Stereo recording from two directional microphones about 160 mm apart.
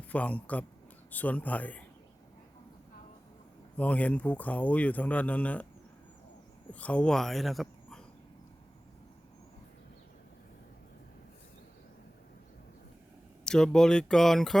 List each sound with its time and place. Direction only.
0.1 s speech: 10° left (ahead or behind)
3.8 s speech: 10° left (ahead or behind)
6.7 s speech: 10° left (ahead or behind)
13.4 s speech: 5° left (ahead or behind)